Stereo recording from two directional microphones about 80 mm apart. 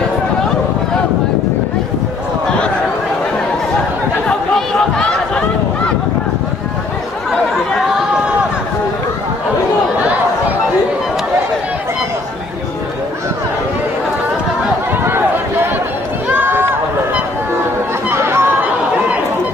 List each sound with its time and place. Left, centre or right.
4.3 s chatter: centre
16.3 s run: right
18.1 s a sound: right